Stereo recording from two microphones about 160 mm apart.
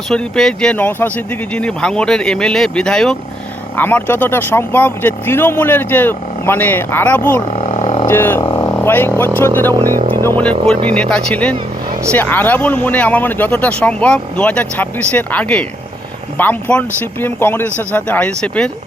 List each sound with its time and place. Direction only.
0.1 s speech: 5° left (ahead or behind)
7.6 s a sound: 40° left (ahead or behind)
8.0 s speech: 15° left (ahead or behind)